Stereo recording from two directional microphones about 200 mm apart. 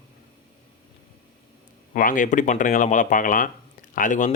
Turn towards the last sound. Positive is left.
turn(degrees=40)  # may be behind; listen again after turning